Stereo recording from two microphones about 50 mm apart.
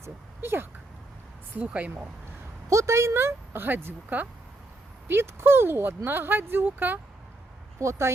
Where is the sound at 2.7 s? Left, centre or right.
Right.